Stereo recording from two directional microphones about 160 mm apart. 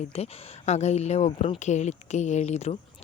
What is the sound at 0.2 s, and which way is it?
Speech, 45° left (ahead or behind).